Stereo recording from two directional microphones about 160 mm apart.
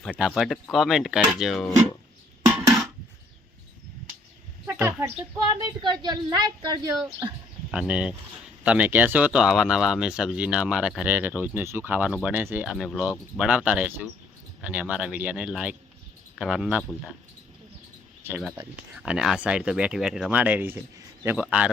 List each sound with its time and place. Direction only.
0.2 s speech: centre (ahead or behind)
4.6 s a woman's voice: 15° right (ahead or behind)
7.7 s speech: 5° right (ahead or behind)
18.2 s speech: 10° right (ahead or behind)